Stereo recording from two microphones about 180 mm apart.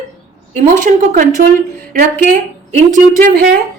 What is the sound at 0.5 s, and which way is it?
Speech, 45° right (ahead or behind).